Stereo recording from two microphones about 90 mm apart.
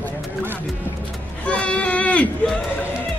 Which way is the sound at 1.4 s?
15° left (ahead or behind).